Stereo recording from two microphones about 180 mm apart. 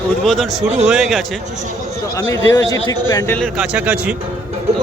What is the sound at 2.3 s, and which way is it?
A man's voice, 15° left (ahead or behind).